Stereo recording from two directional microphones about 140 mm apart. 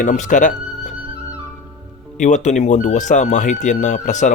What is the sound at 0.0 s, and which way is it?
Speech, 65° left (ahead or behind).